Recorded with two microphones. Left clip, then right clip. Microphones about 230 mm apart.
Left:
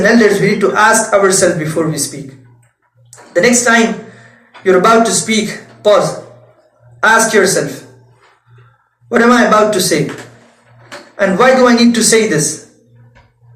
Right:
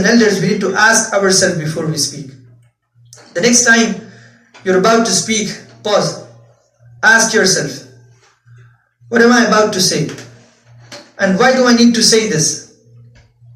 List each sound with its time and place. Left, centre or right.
0.0 s a man's voice: right
3.3 s a man's voice: right
7.0 s a man's voice: right
9.0 s a man's voice: right
11.2 s a man's voice: right